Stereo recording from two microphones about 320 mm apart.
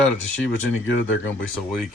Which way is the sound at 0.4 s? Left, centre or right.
Left.